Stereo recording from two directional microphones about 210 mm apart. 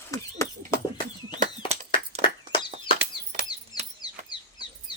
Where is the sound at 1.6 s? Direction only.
25° left (ahead or behind).